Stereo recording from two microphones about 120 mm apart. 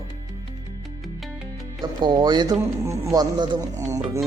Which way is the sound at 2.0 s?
40° right (ahead or behind).